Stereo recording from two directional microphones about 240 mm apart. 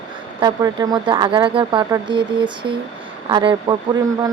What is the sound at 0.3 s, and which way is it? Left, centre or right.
A woman's voice, centre.